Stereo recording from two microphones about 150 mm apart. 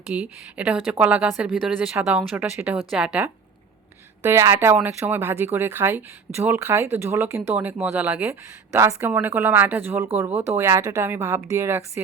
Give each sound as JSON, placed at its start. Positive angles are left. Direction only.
{"t": 0.1, "sound": "speech", "side_deg": -10}
{"t": 4.2, "sound": "speech", "side_deg": -15}